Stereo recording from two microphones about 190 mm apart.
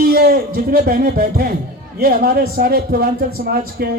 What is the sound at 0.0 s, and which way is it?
A man's voice, 55° right (ahead or behind).